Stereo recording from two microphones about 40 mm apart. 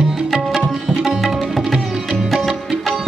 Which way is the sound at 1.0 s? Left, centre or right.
Centre.